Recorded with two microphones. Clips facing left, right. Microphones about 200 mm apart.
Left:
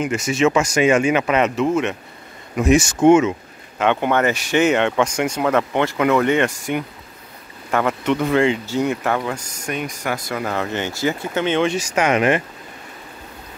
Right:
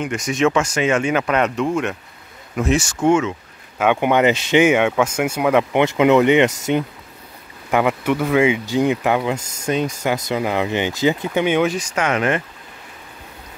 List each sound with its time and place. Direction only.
0.0 s speech: 5° left (ahead or behind)
2.6 s speech: 15° left (ahead or behind)
3.7 s speech: 10° right (ahead or behind)
11.9 s speech: 15° left (ahead or behind)